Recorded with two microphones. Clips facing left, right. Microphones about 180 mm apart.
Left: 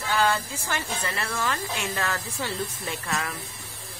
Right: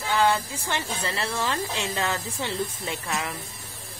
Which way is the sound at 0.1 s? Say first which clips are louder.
Right 2 dB; 20° right (ahead or behind).